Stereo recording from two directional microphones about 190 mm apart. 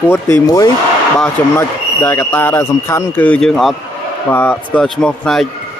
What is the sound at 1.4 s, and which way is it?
Speech, 10° left (ahead or behind).